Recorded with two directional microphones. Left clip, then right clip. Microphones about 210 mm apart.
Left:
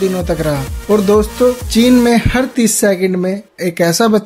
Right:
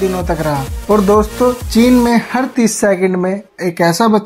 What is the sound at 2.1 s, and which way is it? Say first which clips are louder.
Speech: left 1 dB; 45° left (ahead or behind).